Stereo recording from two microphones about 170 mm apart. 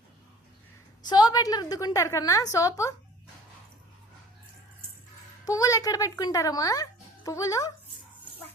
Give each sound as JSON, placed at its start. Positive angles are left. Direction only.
{"t": 1.0, "sound": "a woman's voice", "side_deg": 25}
{"t": 5.5, "sound": "a woman's voice", "side_deg": 20}